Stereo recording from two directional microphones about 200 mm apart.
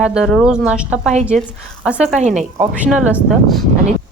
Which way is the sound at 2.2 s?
35° right (ahead or behind).